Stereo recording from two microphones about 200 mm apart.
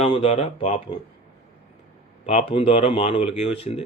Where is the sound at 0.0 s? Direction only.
30° left (ahead or behind).